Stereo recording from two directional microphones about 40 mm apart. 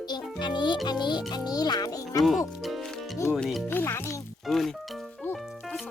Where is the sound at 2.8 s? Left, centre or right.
Centre.